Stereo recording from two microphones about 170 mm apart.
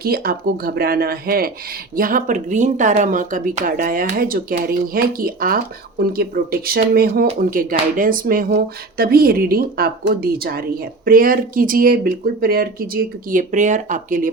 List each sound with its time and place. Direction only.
0.0 s speech: 60° right (ahead or behind)